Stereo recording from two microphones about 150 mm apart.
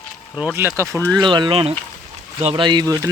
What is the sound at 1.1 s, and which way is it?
Speech, 30° right (ahead or behind).